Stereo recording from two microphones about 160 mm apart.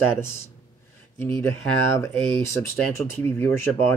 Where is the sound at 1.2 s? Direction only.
15° left (ahead or behind).